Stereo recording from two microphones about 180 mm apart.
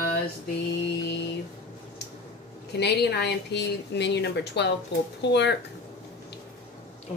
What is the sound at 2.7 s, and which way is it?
A woman's voice, 70° left (ahead or behind).